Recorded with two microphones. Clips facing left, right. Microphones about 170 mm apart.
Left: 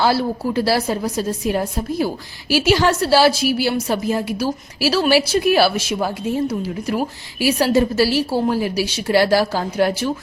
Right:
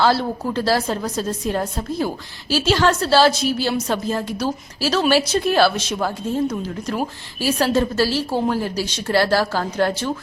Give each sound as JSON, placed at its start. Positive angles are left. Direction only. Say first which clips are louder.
{"t": 0.0, "sound": "a woman's voice", "louder": "left 1 dB", "side_deg": 10}
{"t": 2.5, "sound": "a woman's voice", "louder": "left 2 dB", "side_deg": 15}